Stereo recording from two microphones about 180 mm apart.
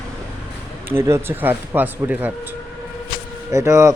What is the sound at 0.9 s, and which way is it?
Speech, 15° right (ahead or behind).